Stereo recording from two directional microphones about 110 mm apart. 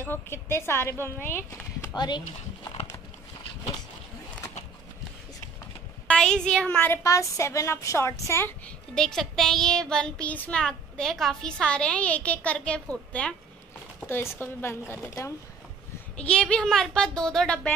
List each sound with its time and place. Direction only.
0.1 s a woman's voice: 25° left (ahead or behind)
2.0 s speech: 40° left (ahead or behind)
6.0 s a child's voice: 5° left (ahead or behind)
6.8 s a woman's voice: 25° left (ahead or behind)
8.6 s speech: 5° left (ahead or behind)
14.0 s a woman's voice: 25° left (ahead or behind)
16.2 s speech: 10° left (ahead or behind)